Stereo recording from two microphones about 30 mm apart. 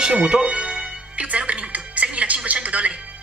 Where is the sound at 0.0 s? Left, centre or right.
Right.